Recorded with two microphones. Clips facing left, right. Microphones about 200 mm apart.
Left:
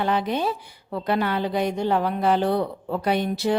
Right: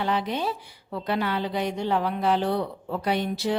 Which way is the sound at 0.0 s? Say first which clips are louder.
Left 3 dB; 50° left (ahead or behind).